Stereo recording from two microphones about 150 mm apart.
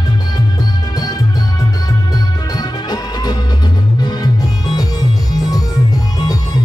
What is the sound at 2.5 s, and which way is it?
Music, 25° left (ahead or behind).